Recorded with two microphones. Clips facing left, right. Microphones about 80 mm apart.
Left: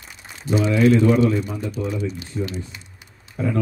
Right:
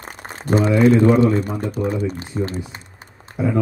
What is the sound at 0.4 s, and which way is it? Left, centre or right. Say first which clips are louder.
Speech: right 3 dB; right.